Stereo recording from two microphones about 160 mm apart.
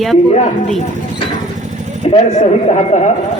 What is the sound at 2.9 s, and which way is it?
Speech, 50° left (ahead or behind).